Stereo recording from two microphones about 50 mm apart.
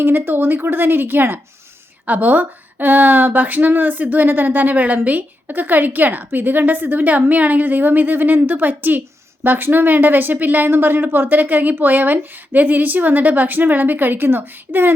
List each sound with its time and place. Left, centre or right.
0.0 s speech: right
2.0 s a woman's voice: right